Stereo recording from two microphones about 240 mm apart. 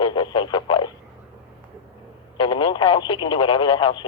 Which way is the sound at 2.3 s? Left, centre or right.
Left.